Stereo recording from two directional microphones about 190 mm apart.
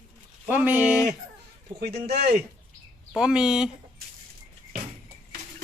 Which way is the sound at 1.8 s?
60° right (ahead or behind).